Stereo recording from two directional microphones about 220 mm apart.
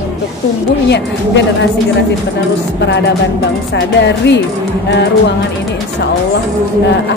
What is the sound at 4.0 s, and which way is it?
Speech, 50° left (ahead or behind).